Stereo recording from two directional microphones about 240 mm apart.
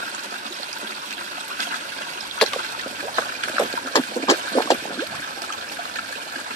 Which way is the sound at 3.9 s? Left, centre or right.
Centre.